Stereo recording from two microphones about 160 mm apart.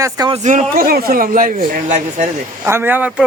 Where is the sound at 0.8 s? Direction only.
65° right (ahead or behind).